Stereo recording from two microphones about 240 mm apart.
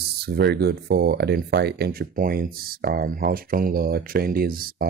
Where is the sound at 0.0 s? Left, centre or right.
Right.